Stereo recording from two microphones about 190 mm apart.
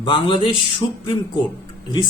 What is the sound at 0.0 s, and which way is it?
A man's voice, 25° left (ahead or behind).